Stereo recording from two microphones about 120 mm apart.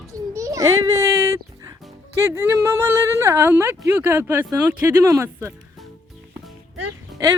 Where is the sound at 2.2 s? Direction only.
20° right (ahead or behind).